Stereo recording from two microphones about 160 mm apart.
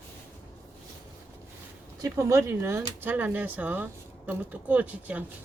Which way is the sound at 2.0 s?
20° right (ahead or behind).